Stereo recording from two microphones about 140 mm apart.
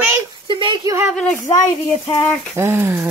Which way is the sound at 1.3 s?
25° left (ahead or behind).